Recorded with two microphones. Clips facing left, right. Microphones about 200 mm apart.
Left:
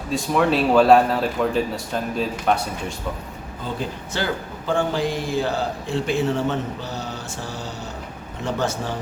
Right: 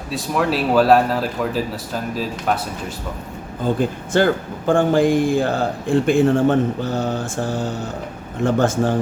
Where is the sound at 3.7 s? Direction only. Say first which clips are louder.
Right 9 dB; 50° right (ahead or behind).